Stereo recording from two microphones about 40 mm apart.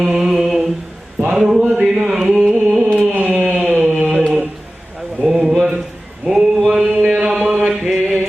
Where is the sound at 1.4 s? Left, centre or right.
Centre.